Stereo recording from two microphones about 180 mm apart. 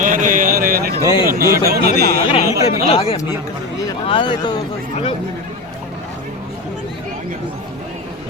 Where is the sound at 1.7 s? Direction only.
60° right (ahead or behind).